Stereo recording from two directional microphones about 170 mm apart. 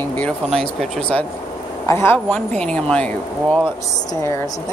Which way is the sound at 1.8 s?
15° left (ahead or behind).